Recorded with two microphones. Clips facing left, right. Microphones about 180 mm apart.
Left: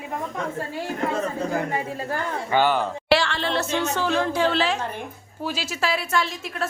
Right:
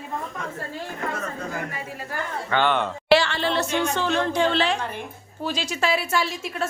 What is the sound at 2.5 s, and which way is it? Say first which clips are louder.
A woman's voice: left 1 dB; 5° left (ahead or behind).